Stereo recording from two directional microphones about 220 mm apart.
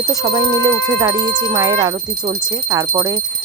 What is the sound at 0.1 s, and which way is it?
Speech, 15° right (ahead or behind).